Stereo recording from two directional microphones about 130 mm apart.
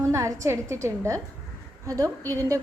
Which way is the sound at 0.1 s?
25° right (ahead or behind).